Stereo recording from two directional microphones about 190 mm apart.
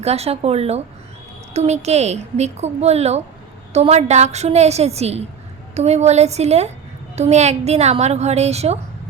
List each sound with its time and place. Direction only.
0.0 s speech: 35° right (ahead or behind)